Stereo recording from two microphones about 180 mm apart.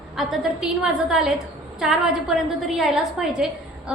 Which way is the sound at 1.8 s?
Centre (ahead or behind).